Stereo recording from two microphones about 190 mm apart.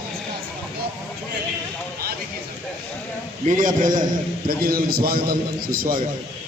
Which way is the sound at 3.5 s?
45° right (ahead or behind).